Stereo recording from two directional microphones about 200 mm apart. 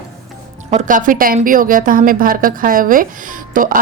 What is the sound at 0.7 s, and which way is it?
A woman's voice, 40° right (ahead or behind).